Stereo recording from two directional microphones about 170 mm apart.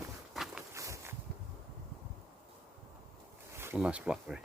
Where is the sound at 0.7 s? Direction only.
15° right (ahead or behind).